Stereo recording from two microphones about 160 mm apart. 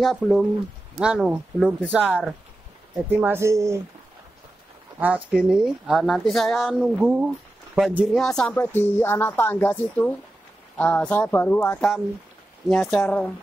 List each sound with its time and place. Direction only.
0.0 s speech: centre (ahead or behind); by 3.8 s 20° right (ahead or behind)
5.0 s speech: 10° right (ahead or behind)